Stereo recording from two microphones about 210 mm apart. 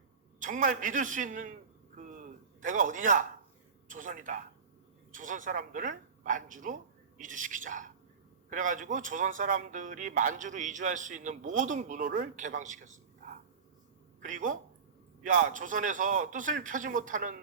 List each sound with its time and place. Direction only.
0.3 s a man's voice: 40° right (ahead or behind)
2.0 s a sound: 40° right (ahead or behind)
3.8 s a man's voice: 40° right (ahead or behind)
14.2 s a man's voice: 35° right (ahead or behind)